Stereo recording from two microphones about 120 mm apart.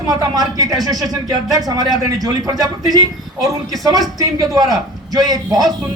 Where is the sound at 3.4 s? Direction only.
30° right (ahead or behind).